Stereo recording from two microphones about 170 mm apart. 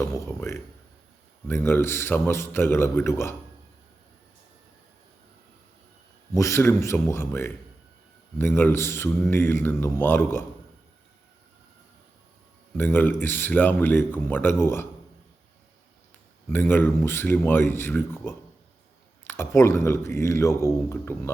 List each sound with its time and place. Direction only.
0.0 s speech: 20° left (ahead or behind)
6.3 s speech: 15° left (ahead or behind)
12.7 s speech: 10° left (ahead or behind)
16.5 s speech: 10° left (ahead or behind)